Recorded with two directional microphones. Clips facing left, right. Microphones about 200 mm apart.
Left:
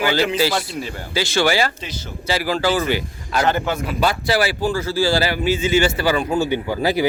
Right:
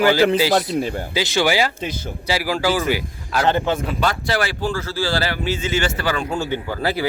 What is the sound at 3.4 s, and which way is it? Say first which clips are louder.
Speech: right 2 dB; 30° right (ahead or behind).